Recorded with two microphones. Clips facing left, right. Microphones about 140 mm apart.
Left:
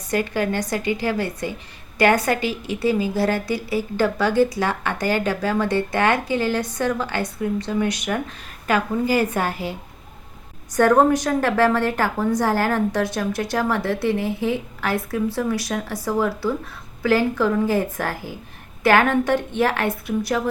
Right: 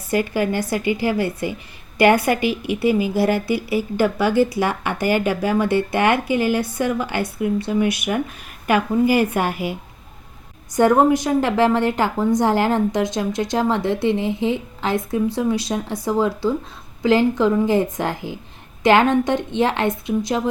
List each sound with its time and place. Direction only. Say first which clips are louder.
0.1 s speech: right 2 dB; 10° right (ahead or behind)
10.8 s a woman's voice: right 1 dB; 15° right (ahead or behind)